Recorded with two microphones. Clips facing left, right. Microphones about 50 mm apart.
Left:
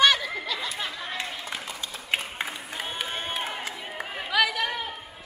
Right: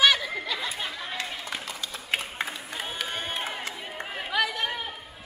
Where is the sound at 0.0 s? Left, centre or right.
Centre.